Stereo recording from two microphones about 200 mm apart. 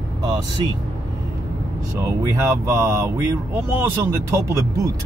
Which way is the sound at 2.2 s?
15° right (ahead or behind).